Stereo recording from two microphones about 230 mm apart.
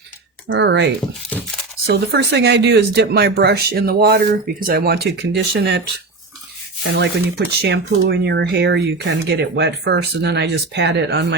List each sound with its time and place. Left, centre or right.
0.4 s speech: right
1.9 s speech: right
6.9 s speech: right